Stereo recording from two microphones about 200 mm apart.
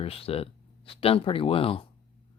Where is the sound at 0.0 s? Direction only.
30° left (ahead or behind).